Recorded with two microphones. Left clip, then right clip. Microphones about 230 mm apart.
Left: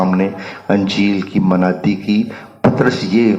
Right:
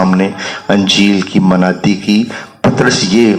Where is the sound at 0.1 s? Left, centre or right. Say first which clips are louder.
Right 4 dB; right.